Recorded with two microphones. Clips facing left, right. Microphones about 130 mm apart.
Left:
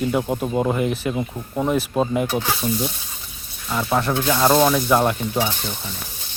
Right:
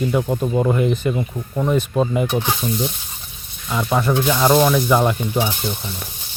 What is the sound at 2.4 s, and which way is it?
Speech, 20° right (ahead or behind).